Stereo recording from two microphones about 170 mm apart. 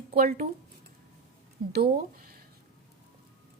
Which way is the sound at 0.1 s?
60° right (ahead or behind).